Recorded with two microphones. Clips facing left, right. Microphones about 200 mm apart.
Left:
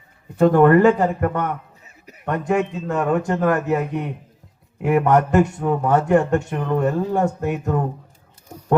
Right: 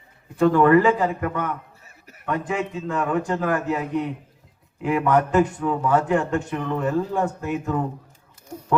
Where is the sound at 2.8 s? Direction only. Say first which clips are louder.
Left 3 dB; 45° left (ahead or behind).